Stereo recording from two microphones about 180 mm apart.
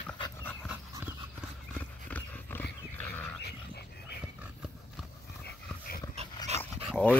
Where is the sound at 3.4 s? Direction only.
65° left (ahead or behind).